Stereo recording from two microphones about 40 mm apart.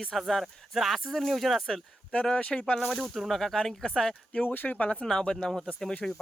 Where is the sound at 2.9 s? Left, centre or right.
Centre.